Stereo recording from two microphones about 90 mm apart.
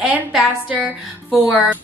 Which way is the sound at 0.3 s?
15° right (ahead or behind).